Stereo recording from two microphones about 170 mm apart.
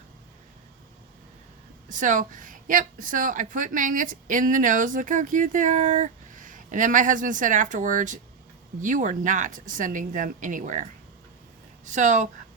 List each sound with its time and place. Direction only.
1.9 s speech: 50° right (ahead or behind)
11.9 s speech: 45° right (ahead or behind)